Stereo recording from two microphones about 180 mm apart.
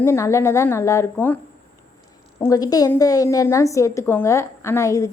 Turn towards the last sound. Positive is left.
turn(degrees=15)  # may be behind; listen again after turning